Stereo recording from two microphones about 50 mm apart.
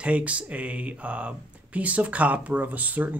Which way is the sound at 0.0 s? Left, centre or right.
Right.